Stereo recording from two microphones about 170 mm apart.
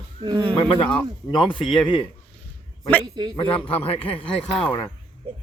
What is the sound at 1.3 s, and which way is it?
Speech, 30° left (ahead or behind).